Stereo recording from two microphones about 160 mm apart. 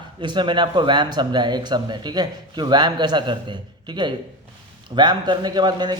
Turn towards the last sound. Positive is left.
turn(degrees=-25)  # may be behind; listen again after turning